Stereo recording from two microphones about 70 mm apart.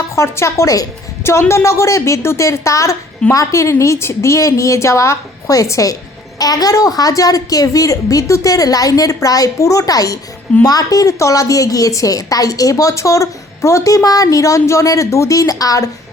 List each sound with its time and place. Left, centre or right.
0.2 s a woman's voice: left
1.2 s a woman's voice: left
6.4 s a woman's voice: left